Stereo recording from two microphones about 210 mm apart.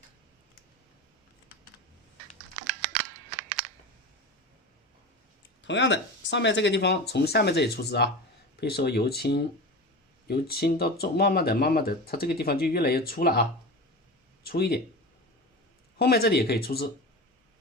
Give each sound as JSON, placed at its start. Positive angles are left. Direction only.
{"t": 5.6, "sound": "speech", "side_deg": 60}
{"t": 14.4, "sound": "speech", "side_deg": 50}
{"t": 16.0, "sound": "speech", "side_deg": 50}